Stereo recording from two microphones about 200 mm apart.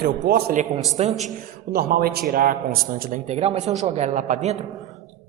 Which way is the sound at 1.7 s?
50° right (ahead or behind).